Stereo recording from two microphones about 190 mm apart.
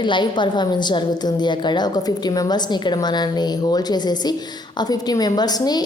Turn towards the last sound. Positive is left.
turn(degrees=20)  # may be behind; listen again after turning